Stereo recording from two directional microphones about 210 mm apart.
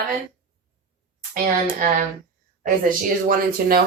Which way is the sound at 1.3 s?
40° right (ahead or behind).